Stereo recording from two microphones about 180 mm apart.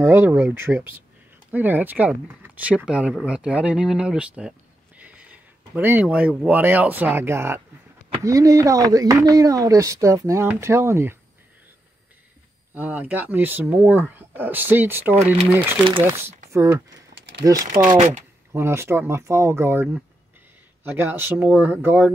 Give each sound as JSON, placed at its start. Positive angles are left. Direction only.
{"t": 0.0, "sound": "speech", "side_deg": -10}
{"t": 12.7, "sound": "speech", "side_deg": -10}
{"t": 17.8, "sound": "speech", "side_deg": -40}
{"t": 18.5, "sound": "speech", "side_deg": -15}